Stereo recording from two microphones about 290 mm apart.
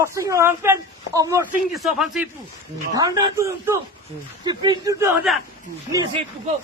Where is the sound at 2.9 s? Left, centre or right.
Centre.